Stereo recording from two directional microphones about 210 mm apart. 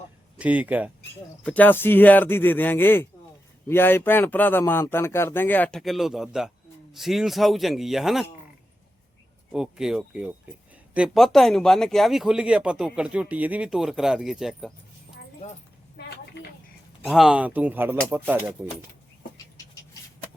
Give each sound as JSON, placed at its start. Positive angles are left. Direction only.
{"t": 0.3, "sound": "speech", "side_deg": -5}
{"t": 1.5, "sound": "speech", "side_deg": 10}
{"t": 9.5, "sound": "speech", "side_deg": -5}
{"t": 16.0, "sound": "a sound", "side_deg": 50}
{"t": 17.0, "sound": "speech", "side_deg": 0}